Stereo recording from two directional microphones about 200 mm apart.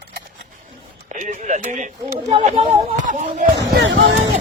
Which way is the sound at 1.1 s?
40° right (ahead or behind).